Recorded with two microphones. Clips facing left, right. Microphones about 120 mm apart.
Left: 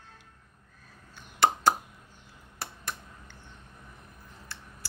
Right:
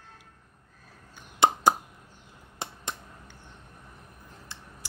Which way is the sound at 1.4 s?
20° right (ahead or behind).